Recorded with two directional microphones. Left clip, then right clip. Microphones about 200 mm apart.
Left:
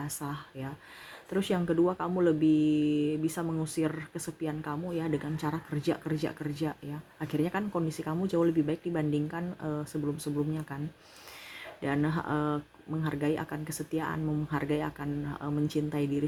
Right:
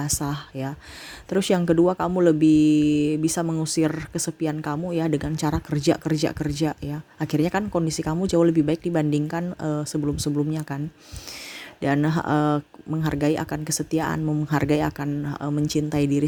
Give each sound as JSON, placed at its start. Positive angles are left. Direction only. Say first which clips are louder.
{"t": 0.0, "sound": "speech", "louder": "right 10 dB", "side_deg": -45}
{"t": 11.8, "sound": "speech", "louder": "right 8 dB", "side_deg": -50}